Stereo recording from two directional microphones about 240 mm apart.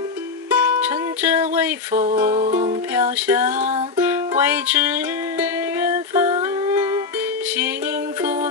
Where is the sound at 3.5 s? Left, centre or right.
Right.